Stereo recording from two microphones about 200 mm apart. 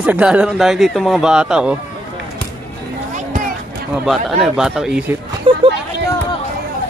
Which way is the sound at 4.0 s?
Centre (ahead or behind).